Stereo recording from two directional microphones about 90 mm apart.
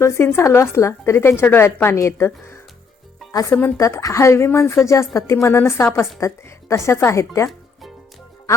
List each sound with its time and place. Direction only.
0.0 s a woman's voice: 30° left (ahead or behind)
3.6 s a woman's voice: 30° left (ahead or behind)